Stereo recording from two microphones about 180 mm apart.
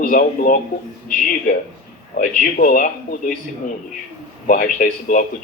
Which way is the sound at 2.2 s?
50° left (ahead or behind).